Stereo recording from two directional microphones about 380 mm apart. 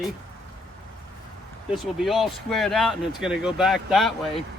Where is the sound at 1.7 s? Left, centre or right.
Centre.